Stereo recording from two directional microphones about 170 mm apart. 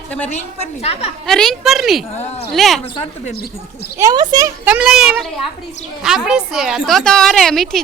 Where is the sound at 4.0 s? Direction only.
20° right (ahead or behind).